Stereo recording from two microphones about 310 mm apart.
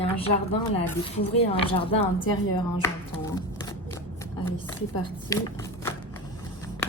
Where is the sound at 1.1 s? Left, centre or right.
Centre.